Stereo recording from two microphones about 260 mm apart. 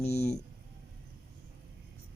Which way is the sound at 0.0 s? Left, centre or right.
Left.